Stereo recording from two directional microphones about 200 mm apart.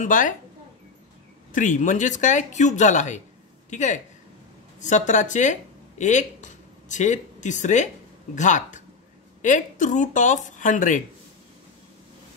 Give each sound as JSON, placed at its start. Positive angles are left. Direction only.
{"t": 0.0, "sound": "speech", "side_deg": 40}
{"t": 1.5, "sound": "speech", "side_deg": 40}